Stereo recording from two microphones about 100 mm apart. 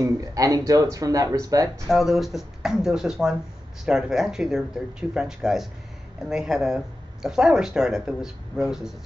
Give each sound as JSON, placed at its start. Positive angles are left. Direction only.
{"t": 0.0, "sound": "speech", "side_deg": -35}
{"t": 1.9, "sound": "speech", "side_deg": 0}